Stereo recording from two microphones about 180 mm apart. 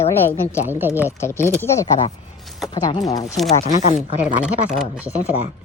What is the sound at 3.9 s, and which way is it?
Speech, 5° right (ahead or behind).